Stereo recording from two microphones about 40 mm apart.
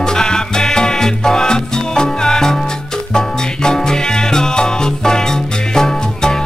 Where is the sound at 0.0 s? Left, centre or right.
Centre.